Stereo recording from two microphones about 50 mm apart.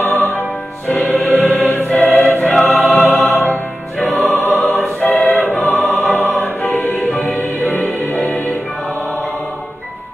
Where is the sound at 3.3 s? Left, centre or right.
Left.